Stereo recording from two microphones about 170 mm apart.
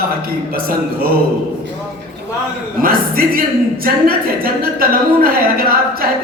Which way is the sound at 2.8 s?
60° right (ahead or behind).